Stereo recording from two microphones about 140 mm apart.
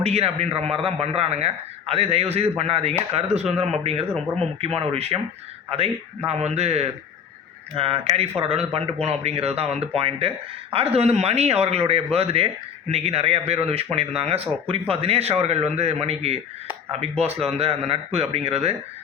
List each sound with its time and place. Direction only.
0.0 s speech: 45° right (ahead or behind)
6.2 s speech: 50° right (ahead or behind)